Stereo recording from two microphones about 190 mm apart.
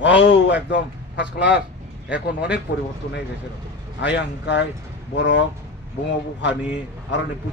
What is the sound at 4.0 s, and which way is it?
A man's voice, 65° left (ahead or behind).